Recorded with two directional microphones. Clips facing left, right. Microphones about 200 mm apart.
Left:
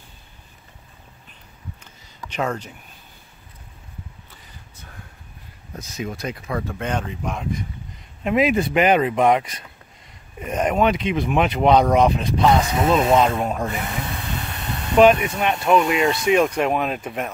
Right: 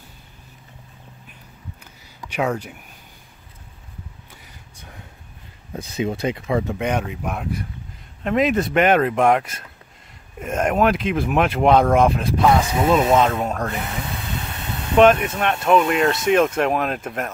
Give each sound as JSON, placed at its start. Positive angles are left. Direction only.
{"t": 2.2, "sound": "speech", "side_deg": -10}
{"t": 5.9, "sound": "speech", "side_deg": -30}
{"t": 8.2, "sound": "speech", "side_deg": 5}
{"t": 15.0, "sound": "speech", "side_deg": 0}